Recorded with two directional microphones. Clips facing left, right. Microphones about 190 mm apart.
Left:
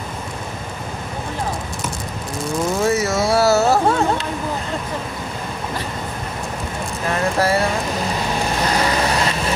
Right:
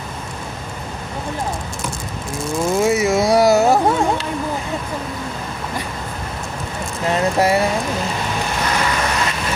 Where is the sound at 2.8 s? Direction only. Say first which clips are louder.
Right 3 dB; 10° right (ahead or behind).